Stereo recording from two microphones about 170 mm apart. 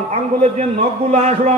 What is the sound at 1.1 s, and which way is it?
Speech, 40° right (ahead or behind).